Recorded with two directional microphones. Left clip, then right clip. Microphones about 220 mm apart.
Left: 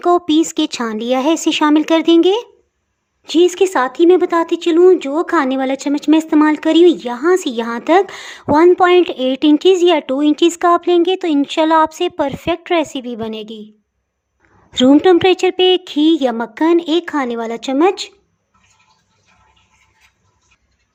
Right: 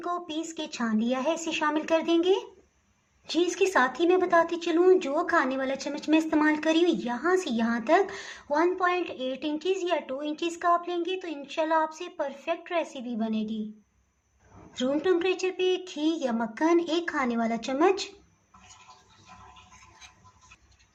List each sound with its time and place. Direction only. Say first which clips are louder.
0.0 s speech: left 19 dB; 50° left (ahead or behind)
14.7 s a woman's voice: left 16 dB; 45° left (ahead or behind)